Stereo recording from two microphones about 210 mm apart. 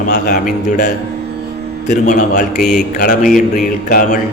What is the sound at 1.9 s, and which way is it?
A man's voice, 35° left (ahead or behind).